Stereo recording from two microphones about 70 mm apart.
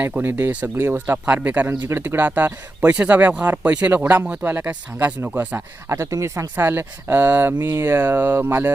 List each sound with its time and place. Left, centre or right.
0.0 s speech: right
1.2 s speech: centre
5.9 s speech: right
6.6 s speech: right